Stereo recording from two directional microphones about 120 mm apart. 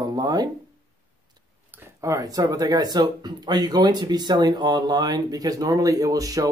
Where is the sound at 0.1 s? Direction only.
30° right (ahead or behind).